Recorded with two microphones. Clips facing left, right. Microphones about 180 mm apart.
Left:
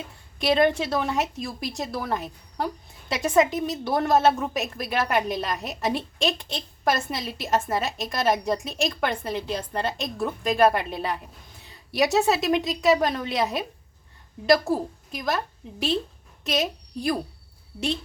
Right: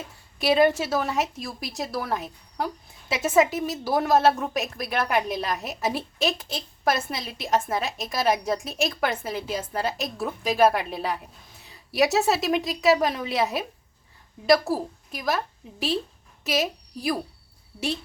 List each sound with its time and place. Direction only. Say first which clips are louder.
0.3 s a woman's voice: right 1 dB; 5° right (ahead or behind)